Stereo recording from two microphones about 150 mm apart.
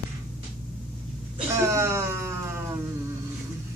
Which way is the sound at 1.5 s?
20° right (ahead or behind).